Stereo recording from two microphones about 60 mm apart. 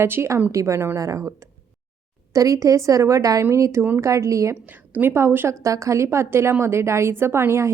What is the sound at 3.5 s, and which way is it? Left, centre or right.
A woman's voice, right.